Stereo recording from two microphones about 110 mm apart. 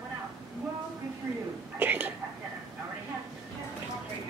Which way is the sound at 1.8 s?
15° right (ahead or behind).